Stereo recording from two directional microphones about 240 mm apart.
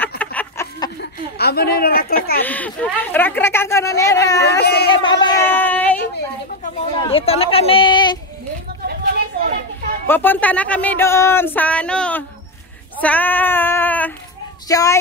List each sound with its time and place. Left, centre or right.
0.2 s chicken: centre
1.4 s speech: left
2.4 s speech: centre
4.4 s speech: left
5.2 s speech: centre
6.6 s speech: left
8.8 s a sound: right
10.0 s speech: centre